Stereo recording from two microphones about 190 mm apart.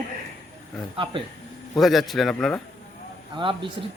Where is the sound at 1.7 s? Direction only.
Centre (ahead or behind).